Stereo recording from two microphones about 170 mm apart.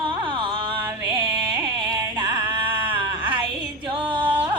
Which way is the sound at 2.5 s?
30° right (ahead or behind).